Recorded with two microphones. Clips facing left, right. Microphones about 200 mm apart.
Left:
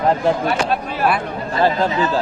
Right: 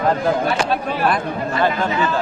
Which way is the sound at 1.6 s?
35° left (ahead or behind).